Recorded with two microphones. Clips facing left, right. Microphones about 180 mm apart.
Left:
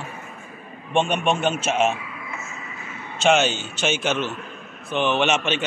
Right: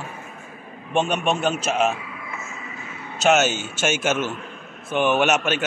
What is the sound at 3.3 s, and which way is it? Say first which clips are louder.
Speech: even; 5° right (ahead or behind).